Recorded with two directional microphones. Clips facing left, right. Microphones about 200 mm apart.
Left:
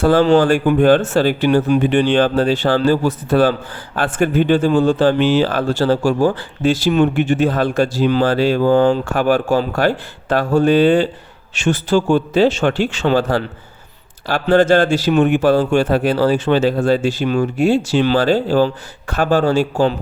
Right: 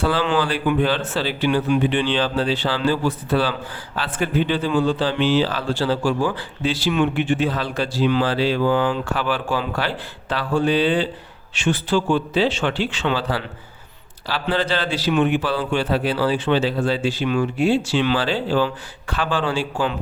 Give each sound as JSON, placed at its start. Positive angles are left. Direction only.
{"t": 0.0, "sound": "speech", "side_deg": 45}